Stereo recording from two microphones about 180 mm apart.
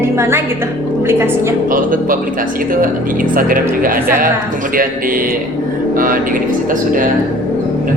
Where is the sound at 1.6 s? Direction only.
50° right (ahead or behind).